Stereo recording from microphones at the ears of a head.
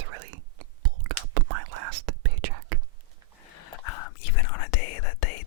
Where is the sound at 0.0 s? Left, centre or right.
Right.